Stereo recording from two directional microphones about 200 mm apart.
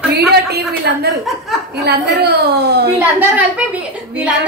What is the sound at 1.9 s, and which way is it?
A woman's voice, 55° right (ahead or behind).